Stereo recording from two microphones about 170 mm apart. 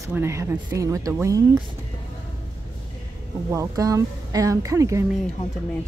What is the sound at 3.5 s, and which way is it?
A woman's voice, 20° right (ahead or behind).